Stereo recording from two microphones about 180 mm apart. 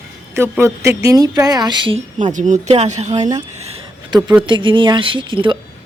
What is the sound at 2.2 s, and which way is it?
Speech, 45° right (ahead or behind).